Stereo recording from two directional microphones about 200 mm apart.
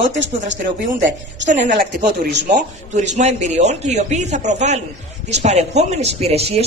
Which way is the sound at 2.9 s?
35° right (ahead or behind).